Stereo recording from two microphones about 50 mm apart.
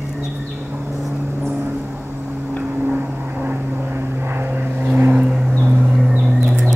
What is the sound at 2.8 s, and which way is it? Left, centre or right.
Vehicle, right.